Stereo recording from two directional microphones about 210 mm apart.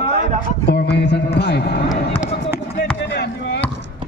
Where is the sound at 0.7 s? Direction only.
50° left (ahead or behind).